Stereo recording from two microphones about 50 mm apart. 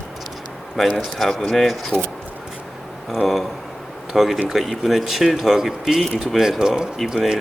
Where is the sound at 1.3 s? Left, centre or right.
Centre.